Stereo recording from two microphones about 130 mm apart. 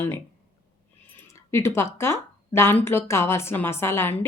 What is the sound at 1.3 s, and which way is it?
A woman's voice, 20° left (ahead or behind).